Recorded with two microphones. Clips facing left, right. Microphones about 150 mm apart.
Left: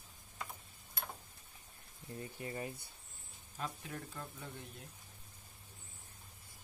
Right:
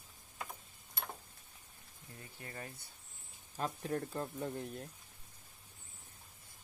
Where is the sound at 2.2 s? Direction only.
20° left (ahead or behind).